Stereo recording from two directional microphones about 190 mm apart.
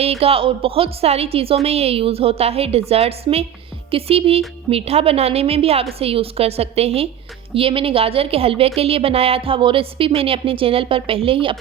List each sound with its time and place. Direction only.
0.0 s a woman's voice: 30° right (ahead or behind)